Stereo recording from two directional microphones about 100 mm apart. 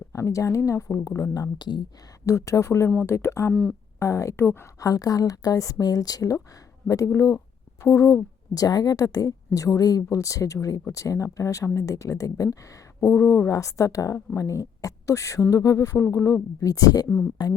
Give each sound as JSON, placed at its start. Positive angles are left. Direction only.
{"t": 0.1, "sound": "speech", "side_deg": 30}
{"t": 2.2, "sound": "speech", "side_deg": 30}